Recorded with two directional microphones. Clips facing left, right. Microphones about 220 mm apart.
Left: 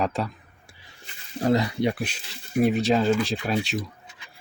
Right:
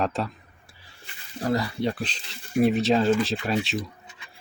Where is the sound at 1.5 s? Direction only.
20° left (ahead or behind).